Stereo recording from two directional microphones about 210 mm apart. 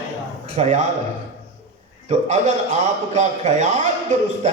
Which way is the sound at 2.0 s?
35° right (ahead or behind).